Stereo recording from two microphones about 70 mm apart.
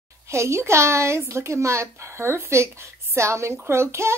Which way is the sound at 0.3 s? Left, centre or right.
Right.